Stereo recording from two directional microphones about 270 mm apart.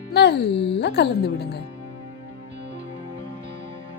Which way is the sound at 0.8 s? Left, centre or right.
Left.